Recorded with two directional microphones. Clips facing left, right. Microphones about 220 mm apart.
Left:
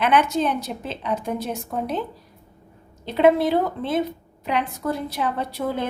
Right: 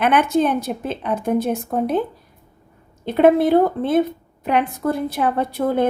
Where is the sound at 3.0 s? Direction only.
55° right (ahead or behind).